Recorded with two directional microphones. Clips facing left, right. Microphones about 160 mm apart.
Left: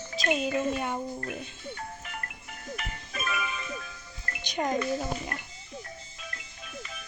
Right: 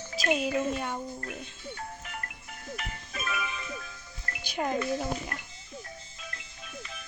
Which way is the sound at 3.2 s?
65° left (ahead or behind).